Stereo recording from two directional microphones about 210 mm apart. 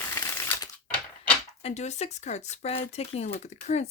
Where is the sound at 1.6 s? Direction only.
30° left (ahead or behind).